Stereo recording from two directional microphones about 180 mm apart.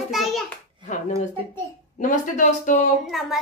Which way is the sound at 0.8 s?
40° left (ahead or behind).